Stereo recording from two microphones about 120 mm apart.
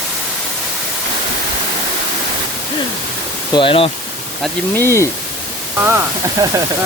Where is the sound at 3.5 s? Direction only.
45° left (ahead or behind).